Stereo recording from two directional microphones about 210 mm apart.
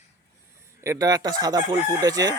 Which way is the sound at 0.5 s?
15° right (ahead or behind).